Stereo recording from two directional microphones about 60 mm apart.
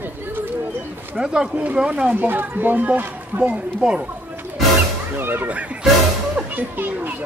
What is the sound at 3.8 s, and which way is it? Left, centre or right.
Speech, centre.